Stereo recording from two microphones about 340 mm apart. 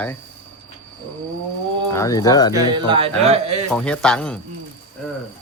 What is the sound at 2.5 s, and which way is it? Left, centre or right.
Speech, centre.